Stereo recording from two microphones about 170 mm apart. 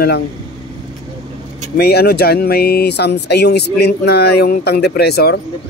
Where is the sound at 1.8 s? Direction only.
70° left (ahead or behind).